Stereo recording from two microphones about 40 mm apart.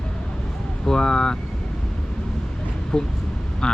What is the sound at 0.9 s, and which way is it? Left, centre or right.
Speech, centre.